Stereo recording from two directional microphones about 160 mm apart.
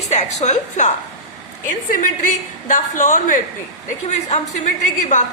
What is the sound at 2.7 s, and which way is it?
A woman's voice, 55° left (ahead or behind).